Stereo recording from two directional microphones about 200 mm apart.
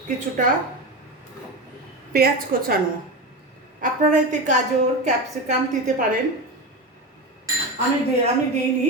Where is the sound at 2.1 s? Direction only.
50° right (ahead or behind).